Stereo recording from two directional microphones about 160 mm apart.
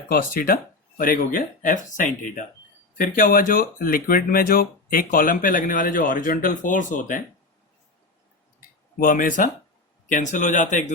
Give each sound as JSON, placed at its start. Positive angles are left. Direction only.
{"t": 0.1, "sound": "speech", "side_deg": 65}
{"t": 9.0, "sound": "a man's voice", "side_deg": 60}